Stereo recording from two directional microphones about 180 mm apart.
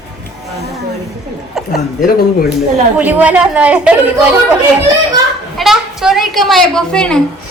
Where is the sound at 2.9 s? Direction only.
10° right (ahead or behind).